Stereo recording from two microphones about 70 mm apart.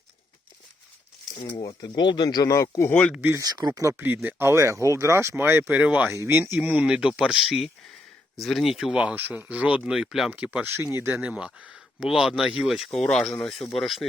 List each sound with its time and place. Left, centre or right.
1.6 s speech: left
2.5 s speech: left
2.9 s speech: centre
3.4 s speech: right
3.8 s speech: right
4.0 s speech: right
5.7 s speech: right
6.2 s speech: right
6.6 s speech: centre
8.9 s speech: centre
9.9 s speech: centre
10.2 s speech: centre
10.6 s speech: right
11.0 s speech: centre